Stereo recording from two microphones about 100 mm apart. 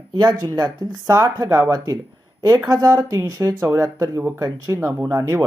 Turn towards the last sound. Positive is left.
turn(degrees=-35)  # may be behind; listen again after turning